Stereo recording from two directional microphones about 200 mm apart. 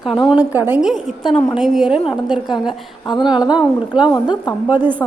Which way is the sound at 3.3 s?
20° left (ahead or behind).